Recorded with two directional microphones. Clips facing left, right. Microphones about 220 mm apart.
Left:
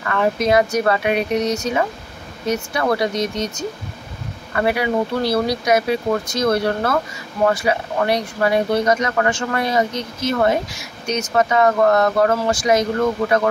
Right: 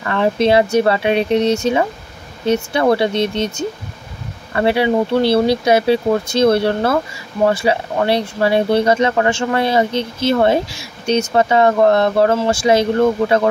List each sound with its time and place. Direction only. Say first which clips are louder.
0.1 s speech: right 3 dB; 30° right (ahead or behind)